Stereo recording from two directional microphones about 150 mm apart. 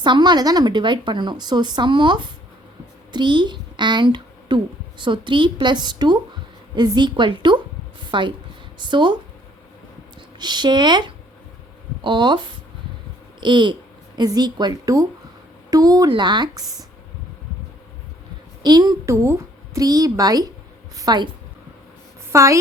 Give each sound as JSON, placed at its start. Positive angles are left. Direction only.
{"t": 0.0, "sound": "a woman's voice", "side_deg": -30}
{"t": 10.3, "sound": "a woman's voice", "side_deg": -30}
{"t": 13.4, "sound": "a woman's voice", "side_deg": -30}
{"t": 18.6, "sound": "a woman's voice", "side_deg": -25}
{"t": 22.3, "sound": "a woman's voice", "side_deg": -20}